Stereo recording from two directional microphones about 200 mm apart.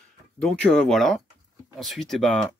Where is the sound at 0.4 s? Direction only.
5° left (ahead or behind).